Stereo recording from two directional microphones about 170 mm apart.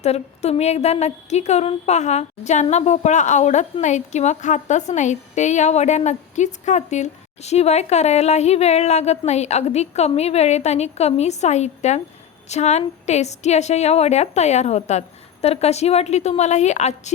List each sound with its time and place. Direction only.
0.0 s a woman's voice: 40° left (ahead or behind)